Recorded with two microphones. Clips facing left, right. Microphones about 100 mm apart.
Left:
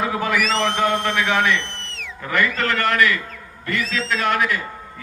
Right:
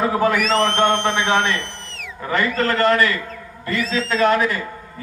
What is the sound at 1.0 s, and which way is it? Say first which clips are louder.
Speech: right 1 dB; 30° right (ahead or behind).